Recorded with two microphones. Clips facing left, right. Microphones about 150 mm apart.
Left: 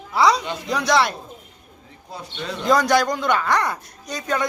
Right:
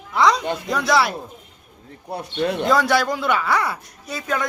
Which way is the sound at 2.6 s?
Centre (ahead or behind).